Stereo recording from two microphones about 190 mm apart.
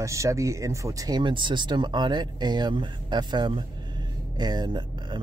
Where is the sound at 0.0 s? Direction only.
15° right (ahead or behind).